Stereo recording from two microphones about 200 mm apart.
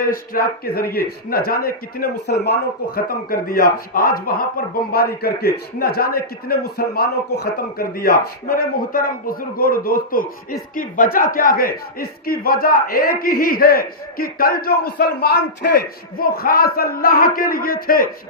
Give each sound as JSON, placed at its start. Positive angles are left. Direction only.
{"t": 0.0, "sound": "a man's voice", "side_deg": 45}